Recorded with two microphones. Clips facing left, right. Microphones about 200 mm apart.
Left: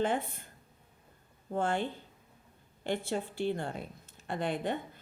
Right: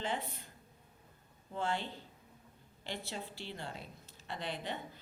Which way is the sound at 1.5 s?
50° left (ahead or behind).